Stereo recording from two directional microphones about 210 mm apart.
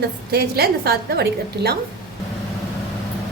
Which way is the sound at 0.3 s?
50° right (ahead or behind).